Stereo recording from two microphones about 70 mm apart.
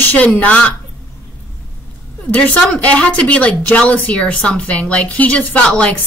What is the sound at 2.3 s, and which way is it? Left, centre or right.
Speech, left.